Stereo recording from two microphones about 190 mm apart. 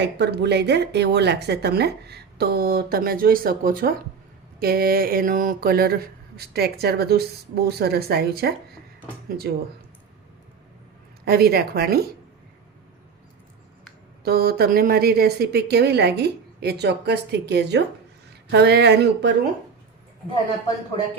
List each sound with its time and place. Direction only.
0.0 s speech: 60° right (ahead or behind)
11.3 s speech: 55° right (ahead or behind)
14.3 s speech: 55° right (ahead or behind)